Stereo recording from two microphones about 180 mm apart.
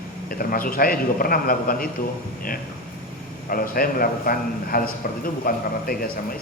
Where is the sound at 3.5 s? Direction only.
55° left (ahead or behind).